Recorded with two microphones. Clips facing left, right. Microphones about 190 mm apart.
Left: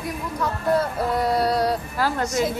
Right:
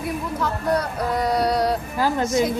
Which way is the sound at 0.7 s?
Centre (ahead or behind).